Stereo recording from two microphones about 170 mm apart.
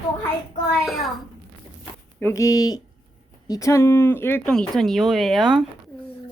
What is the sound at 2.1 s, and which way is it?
A woman's voice, 15° left (ahead or behind).